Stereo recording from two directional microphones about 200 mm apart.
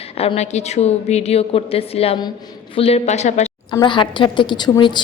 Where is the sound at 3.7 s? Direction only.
20° left (ahead or behind).